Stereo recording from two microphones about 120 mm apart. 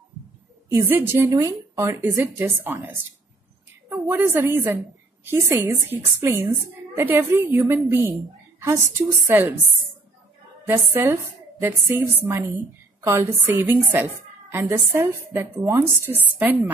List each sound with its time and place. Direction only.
0.7 s a woman's voice: 20° right (ahead or behind)
10.7 s a woman's voice: 20° right (ahead or behind)